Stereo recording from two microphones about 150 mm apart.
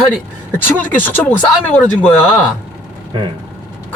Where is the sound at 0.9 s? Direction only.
10° left (ahead or behind).